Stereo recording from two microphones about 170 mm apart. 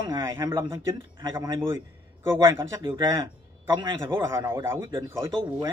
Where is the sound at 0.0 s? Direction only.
20° right (ahead or behind).